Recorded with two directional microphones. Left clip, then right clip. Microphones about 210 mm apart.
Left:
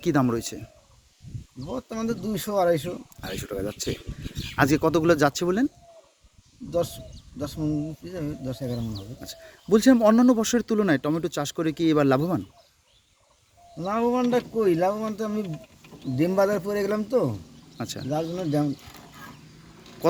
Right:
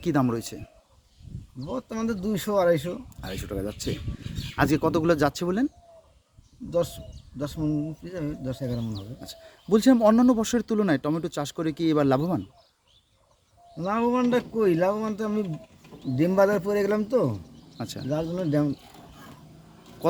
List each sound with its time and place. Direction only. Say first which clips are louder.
0.0 s speech: left 2 dB; centre (ahead or behind)
1.6 s speech: even; 5° right (ahead or behind)
6.7 s speech: even; 10° right (ahead or behind)
13.7 s speech: even; 5° right (ahead or behind)